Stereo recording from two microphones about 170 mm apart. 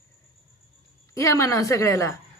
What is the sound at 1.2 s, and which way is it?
Speech, 20° left (ahead or behind).